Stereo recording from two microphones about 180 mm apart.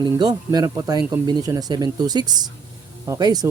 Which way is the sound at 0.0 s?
20° right (ahead or behind).